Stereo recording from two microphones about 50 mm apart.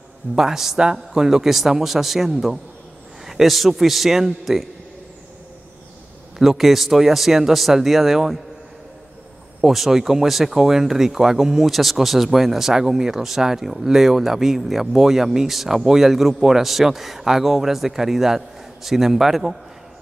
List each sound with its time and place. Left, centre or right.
0.4 s speech: centre
6.3 s speech: centre
9.7 s speech: centre